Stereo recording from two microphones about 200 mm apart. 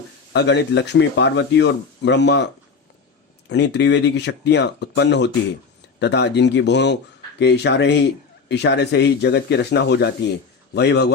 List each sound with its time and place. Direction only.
0.3 s speech: 55° left (ahead or behind)
3.5 s speech: 60° left (ahead or behind)